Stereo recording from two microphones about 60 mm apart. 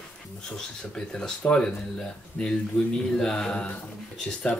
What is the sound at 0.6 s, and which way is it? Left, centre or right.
Speech, centre.